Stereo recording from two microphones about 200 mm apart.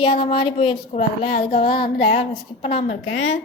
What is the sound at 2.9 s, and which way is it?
Speech, 70° left (ahead or behind).